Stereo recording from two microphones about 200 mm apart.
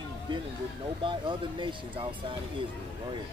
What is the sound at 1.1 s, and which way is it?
Speech, 25° right (ahead or behind).